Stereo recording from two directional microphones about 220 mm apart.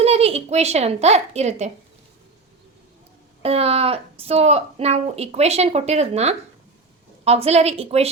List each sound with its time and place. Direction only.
0.0 s a woman's voice: 25° right (ahead or behind)
3.4 s a woman's voice: 25° right (ahead or behind)